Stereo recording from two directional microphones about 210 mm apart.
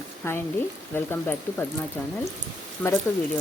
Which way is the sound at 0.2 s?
10° left (ahead or behind).